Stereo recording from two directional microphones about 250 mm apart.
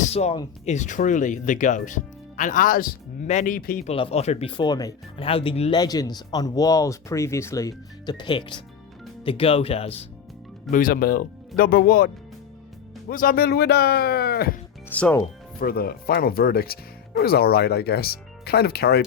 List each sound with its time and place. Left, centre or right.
0.0 s speech: left
3.9 s speech: left
10.7 s speech: left
14.8 s speech: centre
15.6 s speech: left